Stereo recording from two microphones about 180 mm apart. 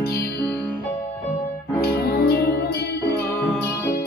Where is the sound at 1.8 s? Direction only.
60° left (ahead or behind).